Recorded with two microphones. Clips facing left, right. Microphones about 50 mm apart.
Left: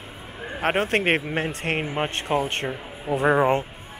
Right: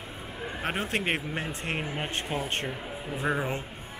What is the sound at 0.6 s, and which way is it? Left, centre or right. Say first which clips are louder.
Speech: left 8 dB; left.